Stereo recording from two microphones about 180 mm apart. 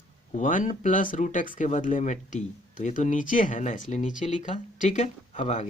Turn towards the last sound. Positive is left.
turn(degrees=40)  # may be behind; listen again after turning